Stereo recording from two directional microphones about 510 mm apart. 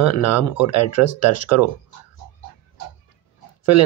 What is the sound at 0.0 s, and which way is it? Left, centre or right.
Speech, left.